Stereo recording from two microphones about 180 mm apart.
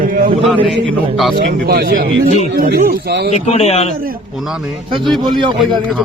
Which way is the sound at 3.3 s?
35° left (ahead or behind).